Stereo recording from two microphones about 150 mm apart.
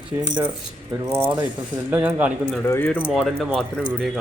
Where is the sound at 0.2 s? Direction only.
25° right (ahead or behind); by 2.3 s 10° right (ahead or behind).